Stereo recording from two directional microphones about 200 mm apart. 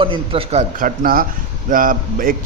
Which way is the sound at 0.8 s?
45° right (ahead or behind).